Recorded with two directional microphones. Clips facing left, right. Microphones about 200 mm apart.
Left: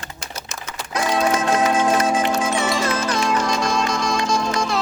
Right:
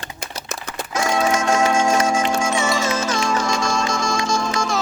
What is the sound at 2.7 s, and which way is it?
Music, 5° right (ahead or behind).